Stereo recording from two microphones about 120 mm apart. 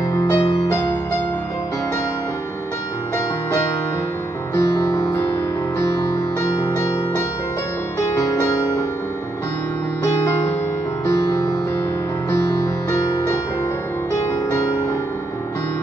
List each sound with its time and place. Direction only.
0.1 s music: 30° left (ahead or behind)
4.9 s music: 20° left (ahead or behind)
6.4 s music: 25° left (ahead or behind)
12.9 s music: 25° left (ahead or behind)
14.5 s music: 25° left (ahead or behind)